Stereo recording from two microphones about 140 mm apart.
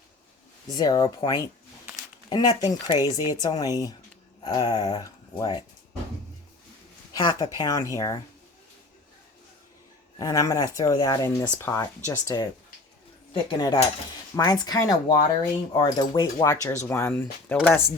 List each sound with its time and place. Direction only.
0.7 s speech: 25° left (ahead or behind)
7.1 s speech: 30° left (ahead or behind)
10.2 s speech: 25° left (ahead or behind)